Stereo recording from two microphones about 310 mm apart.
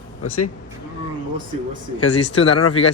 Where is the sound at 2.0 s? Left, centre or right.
Left.